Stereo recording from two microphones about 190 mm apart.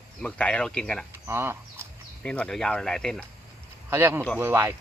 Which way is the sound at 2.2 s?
5° left (ahead or behind).